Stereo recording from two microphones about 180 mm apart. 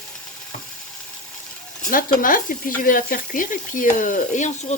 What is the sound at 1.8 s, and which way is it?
Speech, 50° left (ahead or behind).